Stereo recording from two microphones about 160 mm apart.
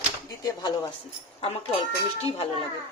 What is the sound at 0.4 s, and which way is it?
Speech, 25° left (ahead or behind).